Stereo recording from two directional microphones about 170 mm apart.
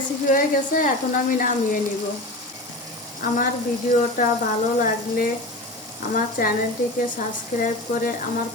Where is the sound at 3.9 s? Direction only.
50° left (ahead or behind).